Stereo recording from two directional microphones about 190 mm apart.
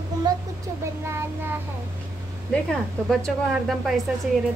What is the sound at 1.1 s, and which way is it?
Child singing, 15° right (ahead or behind).